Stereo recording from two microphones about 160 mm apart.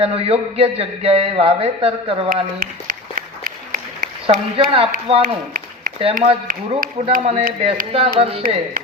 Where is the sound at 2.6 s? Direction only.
60° right (ahead or behind).